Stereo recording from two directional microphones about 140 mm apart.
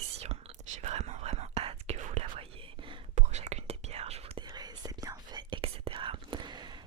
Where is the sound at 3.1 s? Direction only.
50° right (ahead or behind).